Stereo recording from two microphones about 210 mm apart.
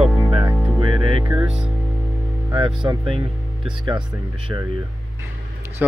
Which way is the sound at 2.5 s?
20° right (ahead or behind).